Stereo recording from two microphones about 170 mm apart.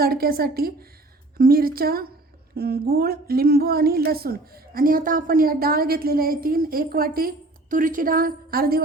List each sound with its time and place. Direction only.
0.0 s a woman's voice: 60° right (ahead or behind)